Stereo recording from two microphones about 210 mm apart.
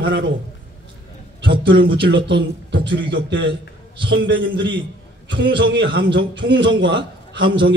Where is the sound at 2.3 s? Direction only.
55° right (ahead or behind).